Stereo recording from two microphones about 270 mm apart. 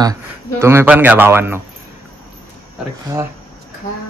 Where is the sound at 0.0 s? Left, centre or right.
Centre.